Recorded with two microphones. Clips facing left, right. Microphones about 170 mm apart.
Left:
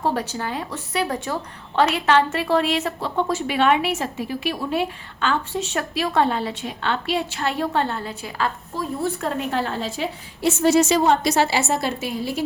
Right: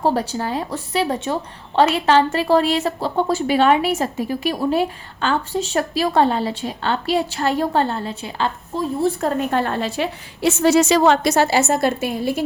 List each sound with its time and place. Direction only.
0.0 s a woman's voice: 35° right (ahead or behind)
9.4 s a woman's voice: 50° right (ahead or behind); by 11.3 s 90° right
11.3 s a woman's voice: 45° right (ahead or behind)